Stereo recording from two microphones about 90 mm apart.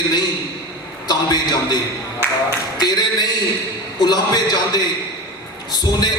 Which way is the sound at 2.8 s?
50° left (ahead or behind).